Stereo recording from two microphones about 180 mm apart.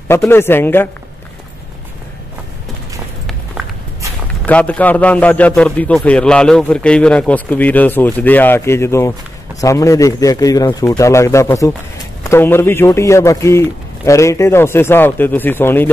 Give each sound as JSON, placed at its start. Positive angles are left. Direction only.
{"t": 0.3, "sound": "a man's voice", "side_deg": 10}
{"t": 4.5, "sound": "a man's voice", "side_deg": 10}